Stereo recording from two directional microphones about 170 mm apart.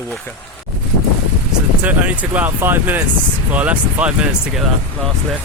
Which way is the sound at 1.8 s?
10° right (ahead or behind).